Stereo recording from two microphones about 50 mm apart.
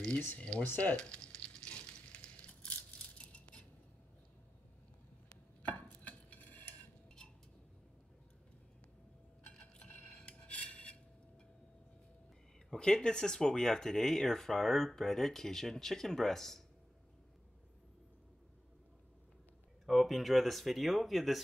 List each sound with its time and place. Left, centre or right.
0.4 s speech: left
0.9 s sizzle: centre
3.2 s scissors: left
5.6 s a sound: left
9.4 s dishes: centre
10.2 s filing: left
12.6 s speech: centre
19.9 s speech: centre